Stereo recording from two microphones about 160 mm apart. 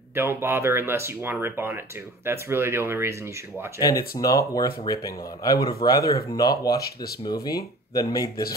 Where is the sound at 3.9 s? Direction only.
70° left (ahead or behind).